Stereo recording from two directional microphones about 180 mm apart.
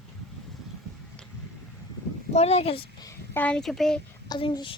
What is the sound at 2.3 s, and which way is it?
Speech, 35° left (ahead or behind).